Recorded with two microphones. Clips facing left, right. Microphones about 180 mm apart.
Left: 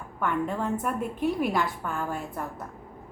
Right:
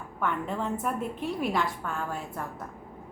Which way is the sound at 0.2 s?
Centre (ahead or behind).